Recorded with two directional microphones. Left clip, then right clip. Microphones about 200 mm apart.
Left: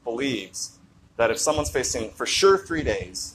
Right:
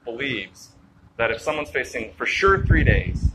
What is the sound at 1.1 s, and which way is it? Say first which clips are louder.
A man's voice: left 1 dB; 15° left (ahead or behind).